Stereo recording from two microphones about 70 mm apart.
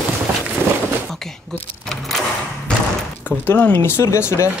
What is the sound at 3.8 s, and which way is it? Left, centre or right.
Speech, left.